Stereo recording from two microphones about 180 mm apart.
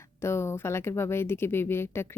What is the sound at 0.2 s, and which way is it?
Speech, 15° left (ahead or behind).